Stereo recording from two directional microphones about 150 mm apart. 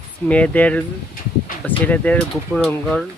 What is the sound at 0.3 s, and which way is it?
Speech, 10° left (ahead or behind).